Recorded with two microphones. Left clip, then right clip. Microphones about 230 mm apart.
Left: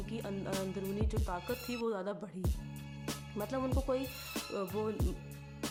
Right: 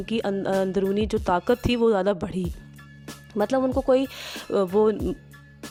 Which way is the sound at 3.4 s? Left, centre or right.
Right.